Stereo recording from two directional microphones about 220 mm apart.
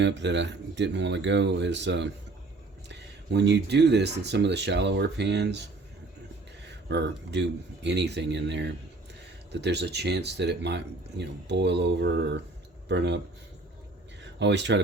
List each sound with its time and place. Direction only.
0.0 s speech: 55° right (ahead or behind)
6.7 s speech: 50° right (ahead or behind)
14.3 s speech: 50° right (ahead or behind)